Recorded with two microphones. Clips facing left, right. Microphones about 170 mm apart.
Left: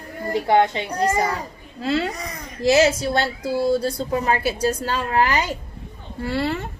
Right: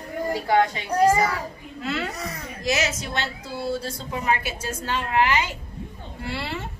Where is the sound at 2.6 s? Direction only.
30° left (ahead or behind).